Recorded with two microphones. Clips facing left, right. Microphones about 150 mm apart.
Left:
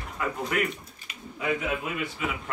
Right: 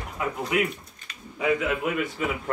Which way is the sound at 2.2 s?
45° right (ahead or behind).